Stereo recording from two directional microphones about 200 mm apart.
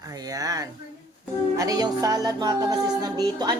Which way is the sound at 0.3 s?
15° right (ahead or behind).